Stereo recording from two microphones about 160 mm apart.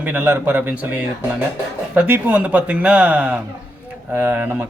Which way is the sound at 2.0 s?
10° right (ahead or behind).